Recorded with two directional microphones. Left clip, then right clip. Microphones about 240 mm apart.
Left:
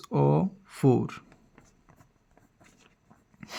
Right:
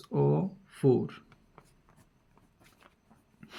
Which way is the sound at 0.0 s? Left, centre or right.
Left.